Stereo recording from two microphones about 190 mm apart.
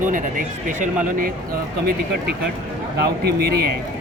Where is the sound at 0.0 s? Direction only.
45° right (ahead or behind).